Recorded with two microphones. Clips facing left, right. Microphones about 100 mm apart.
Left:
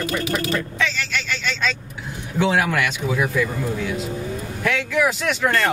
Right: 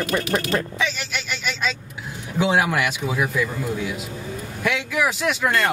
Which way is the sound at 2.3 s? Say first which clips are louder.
Even; 15° right (ahead or behind).